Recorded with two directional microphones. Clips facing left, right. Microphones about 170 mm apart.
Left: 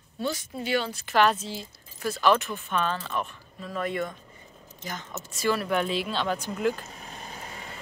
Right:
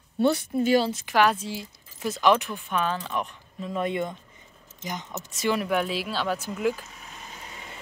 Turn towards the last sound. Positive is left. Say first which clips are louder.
# left 2 dB
turn(degrees=35)  # may be behind; listen again after turning